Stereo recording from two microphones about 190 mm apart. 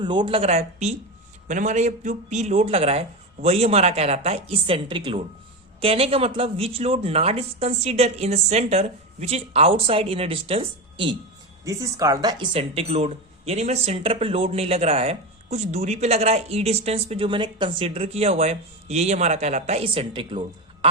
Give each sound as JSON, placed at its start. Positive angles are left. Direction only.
{"t": 0.0, "sound": "speech", "side_deg": -25}
{"t": 11.6, "sound": "speech", "side_deg": -15}